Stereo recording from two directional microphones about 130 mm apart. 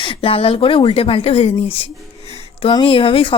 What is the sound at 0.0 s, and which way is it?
Speech, 40° left (ahead or behind).